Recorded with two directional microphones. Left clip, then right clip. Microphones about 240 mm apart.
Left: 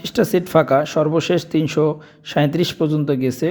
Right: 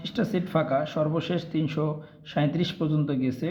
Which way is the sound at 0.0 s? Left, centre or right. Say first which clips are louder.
Left 11 dB; left.